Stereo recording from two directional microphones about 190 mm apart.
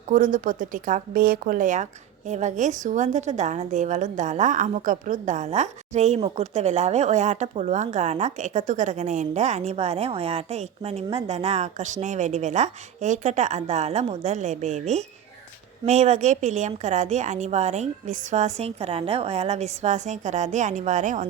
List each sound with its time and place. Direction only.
0.1 s speech: 45° right (ahead or behind)